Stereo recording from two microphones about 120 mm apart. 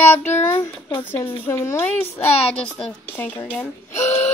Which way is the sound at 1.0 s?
20° left (ahead or behind).